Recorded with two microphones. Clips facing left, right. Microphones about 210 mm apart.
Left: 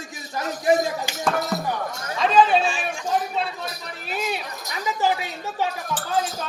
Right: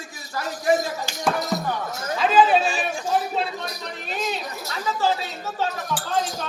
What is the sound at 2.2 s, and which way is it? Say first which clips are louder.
Chatter: even; 5° right (ahead or behind).